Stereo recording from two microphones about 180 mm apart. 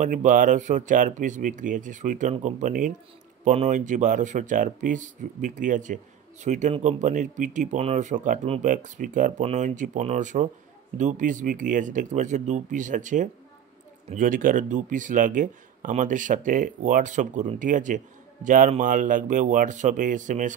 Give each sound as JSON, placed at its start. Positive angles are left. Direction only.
{"t": 0.0, "sound": "speech", "side_deg": -45}